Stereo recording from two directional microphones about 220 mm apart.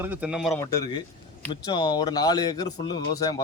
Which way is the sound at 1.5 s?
20° left (ahead or behind).